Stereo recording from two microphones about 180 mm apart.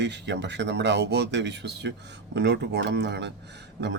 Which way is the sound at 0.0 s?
75° right (ahead or behind).